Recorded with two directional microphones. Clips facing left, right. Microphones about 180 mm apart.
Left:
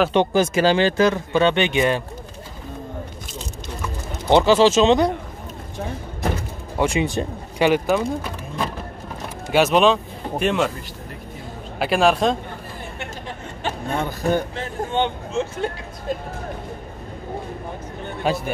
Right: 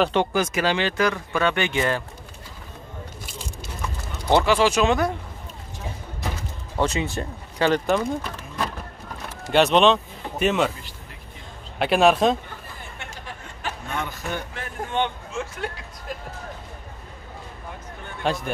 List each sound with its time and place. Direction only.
0.1 s speech: 25° left (ahead or behind)
4.3 s speech: 25° left (ahead or behind)
6.8 s speech: 15° left (ahead or behind)
9.5 s a man's voice: 5° left (ahead or behind)
11.8 s a man's voice: centre (ahead or behind)
13.6 s speech: 30° left (ahead or behind)
18.2 s speech: 5° left (ahead or behind)